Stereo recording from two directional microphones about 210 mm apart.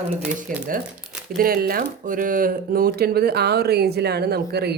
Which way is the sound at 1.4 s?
45° right (ahead or behind).